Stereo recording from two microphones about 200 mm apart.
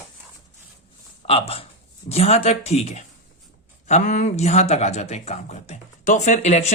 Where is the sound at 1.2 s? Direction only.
30° left (ahead or behind).